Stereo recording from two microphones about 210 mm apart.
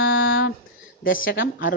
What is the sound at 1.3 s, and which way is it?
Music, 45° left (ahead or behind).